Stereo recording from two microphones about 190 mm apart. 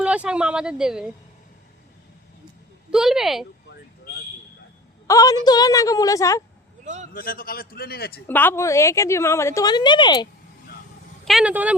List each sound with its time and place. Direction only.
0.0 s speech: 5° right (ahead or behind)
2.9 s speech: centre (ahead or behind)
5.0 s a woman's voice: 20° left (ahead or behind)
6.8 s a man's voice: 40° right (ahead or behind)
7.1 s a man's voice: 50° left (ahead or behind)
8.3 s a woman's voice: 10° left (ahead or behind)
11.3 s speech: 5° right (ahead or behind)